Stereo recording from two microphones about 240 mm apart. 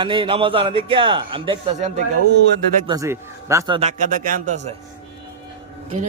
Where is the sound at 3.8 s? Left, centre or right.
Right.